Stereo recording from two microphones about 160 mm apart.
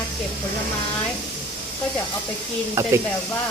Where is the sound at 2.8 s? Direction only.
20° right (ahead or behind).